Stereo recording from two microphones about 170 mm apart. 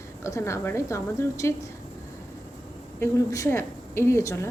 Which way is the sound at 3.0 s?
15° left (ahead or behind).